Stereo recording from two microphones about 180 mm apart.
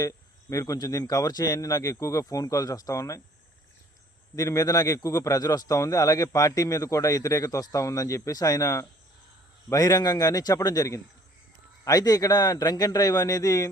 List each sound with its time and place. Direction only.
0.5 s a man's voice: 20° left (ahead or behind)
4.4 s a man's voice: 20° left (ahead or behind)